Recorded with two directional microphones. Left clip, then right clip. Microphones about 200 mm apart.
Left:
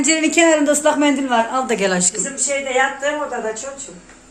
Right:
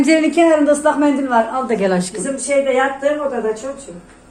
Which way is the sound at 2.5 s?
60° left (ahead or behind).